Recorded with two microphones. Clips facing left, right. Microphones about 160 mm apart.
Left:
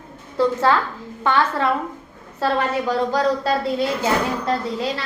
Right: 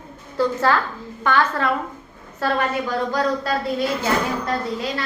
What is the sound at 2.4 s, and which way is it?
A woman's voice, 30° left (ahead or behind).